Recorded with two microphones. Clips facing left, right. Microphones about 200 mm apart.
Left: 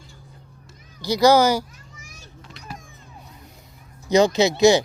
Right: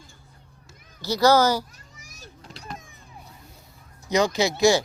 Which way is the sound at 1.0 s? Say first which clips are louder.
Left 3 dB; 15° left (ahead or behind).